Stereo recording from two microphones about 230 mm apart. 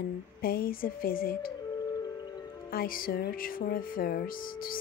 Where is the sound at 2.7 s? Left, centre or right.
Left.